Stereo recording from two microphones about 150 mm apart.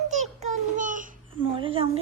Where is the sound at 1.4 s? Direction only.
35° right (ahead or behind).